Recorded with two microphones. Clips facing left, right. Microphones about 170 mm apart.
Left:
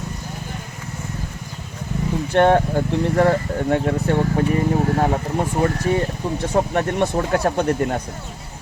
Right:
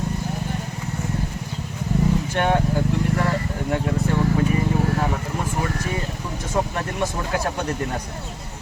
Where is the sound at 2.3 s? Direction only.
55° left (ahead or behind).